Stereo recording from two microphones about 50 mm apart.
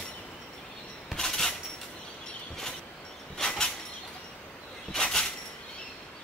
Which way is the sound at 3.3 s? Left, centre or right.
Centre.